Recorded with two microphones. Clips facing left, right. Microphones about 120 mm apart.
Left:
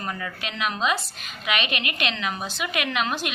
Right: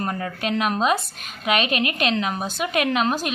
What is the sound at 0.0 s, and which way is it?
A woman's voice, 40° right (ahead or behind).